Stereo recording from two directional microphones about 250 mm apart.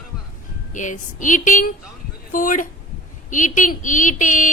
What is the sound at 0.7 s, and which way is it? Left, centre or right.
Speech, left.